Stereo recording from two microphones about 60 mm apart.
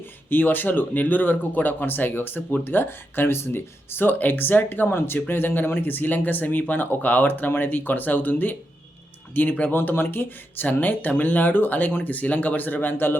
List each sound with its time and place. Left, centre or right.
0.3 s speech: left